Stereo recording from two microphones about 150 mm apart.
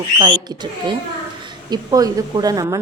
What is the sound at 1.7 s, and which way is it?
A woman's voice, 25° right (ahead or behind).